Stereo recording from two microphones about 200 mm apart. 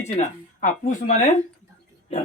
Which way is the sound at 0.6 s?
40° left (ahead or behind).